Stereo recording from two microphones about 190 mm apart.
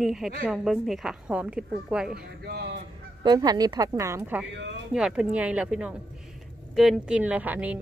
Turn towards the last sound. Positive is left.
turn(degrees=-10)  # may be behind; listen again after turning